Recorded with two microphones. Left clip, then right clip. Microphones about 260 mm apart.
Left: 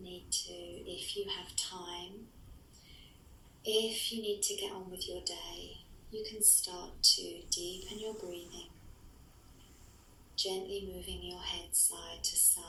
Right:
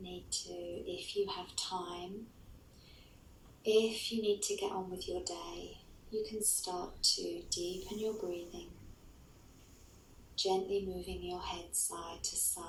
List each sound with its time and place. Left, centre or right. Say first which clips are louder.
0.0 s a sound: left 3 dB; centre
3.6 s a woman's voice: right 2 dB; centre
10.4 s a woman's voice: right 4 dB; centre